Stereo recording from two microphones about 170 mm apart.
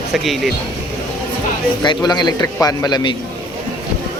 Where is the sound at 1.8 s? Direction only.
25° left (ahead or behind).